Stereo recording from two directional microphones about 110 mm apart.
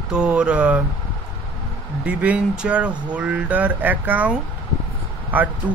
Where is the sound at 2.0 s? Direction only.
10° right (ahead or behind).